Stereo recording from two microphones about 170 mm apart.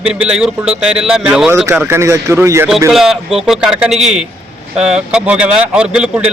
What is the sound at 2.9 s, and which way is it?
A man's voice, centre (ahead or behind).